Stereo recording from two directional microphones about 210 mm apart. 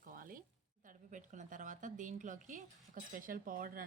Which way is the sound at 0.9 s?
35° right (ahead or behind).